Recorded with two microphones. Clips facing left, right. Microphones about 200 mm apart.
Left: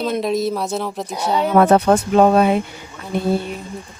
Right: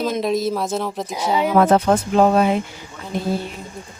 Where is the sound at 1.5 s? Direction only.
65° left (ahead or behind).